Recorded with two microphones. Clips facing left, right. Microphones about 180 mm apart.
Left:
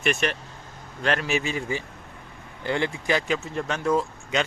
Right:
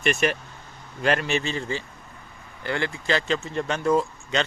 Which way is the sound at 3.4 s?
Centre (ahead or behind).